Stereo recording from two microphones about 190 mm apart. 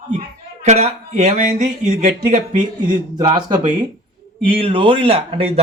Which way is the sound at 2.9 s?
20° right (ahead or behind).